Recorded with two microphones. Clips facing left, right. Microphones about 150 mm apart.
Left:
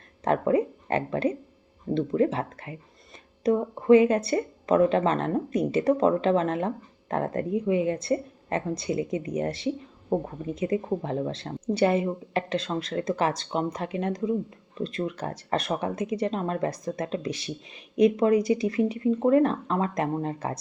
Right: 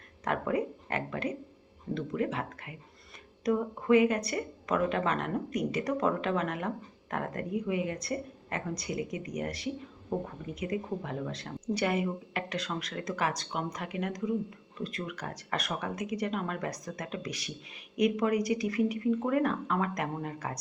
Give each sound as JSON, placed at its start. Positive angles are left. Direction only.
{"t": 0.3, "sound": "speech", "side_deg": 30}